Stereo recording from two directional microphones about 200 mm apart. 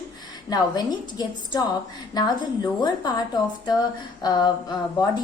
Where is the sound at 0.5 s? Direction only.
20° left (ahead or behind).